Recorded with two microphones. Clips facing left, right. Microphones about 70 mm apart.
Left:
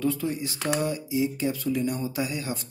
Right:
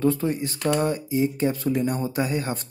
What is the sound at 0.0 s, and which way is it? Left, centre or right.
Speech, right.